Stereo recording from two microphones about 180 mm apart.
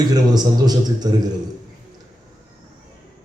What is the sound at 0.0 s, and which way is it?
Speech, 20° right (ahead or behind).